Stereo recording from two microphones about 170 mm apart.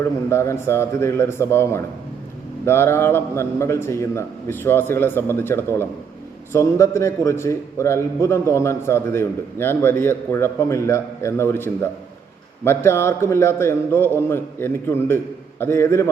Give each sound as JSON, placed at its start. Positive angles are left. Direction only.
{"t": 0.0, "sound": "a man's voice", "side_deg": 15}